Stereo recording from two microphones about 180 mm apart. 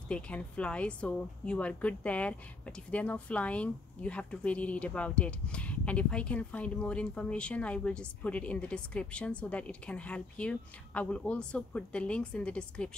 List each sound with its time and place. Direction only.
0.1 s a woman's voice: 5° left (ahead or behind)